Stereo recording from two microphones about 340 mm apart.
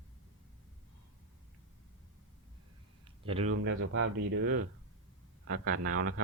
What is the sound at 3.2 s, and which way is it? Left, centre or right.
Speech, centre.